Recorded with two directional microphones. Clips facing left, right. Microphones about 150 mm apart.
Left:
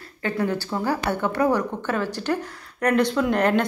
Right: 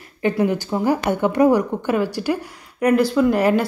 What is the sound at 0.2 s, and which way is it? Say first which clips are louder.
A woman's voice: right 5 dB; 15° right (ahead or behind).